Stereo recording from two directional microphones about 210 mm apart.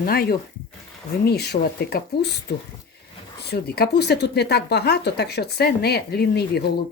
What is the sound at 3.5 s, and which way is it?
Speech, 50° left (ahead or behind).